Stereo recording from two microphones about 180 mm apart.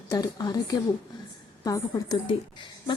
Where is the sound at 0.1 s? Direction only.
20° left (ahead or behind).